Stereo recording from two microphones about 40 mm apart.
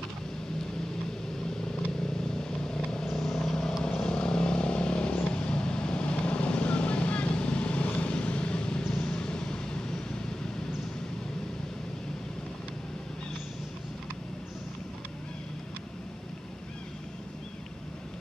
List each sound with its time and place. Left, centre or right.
2.0 s vehicle: centre